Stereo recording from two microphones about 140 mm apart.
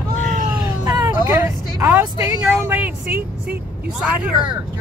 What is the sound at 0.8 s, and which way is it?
Vehicle, 20° right (ahead or behind).